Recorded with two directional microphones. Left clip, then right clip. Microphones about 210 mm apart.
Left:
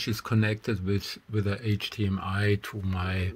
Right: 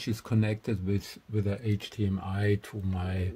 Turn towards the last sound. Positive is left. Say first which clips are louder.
# left 4 dB
turn(degrees=-5)  # may be behind; listen again after turning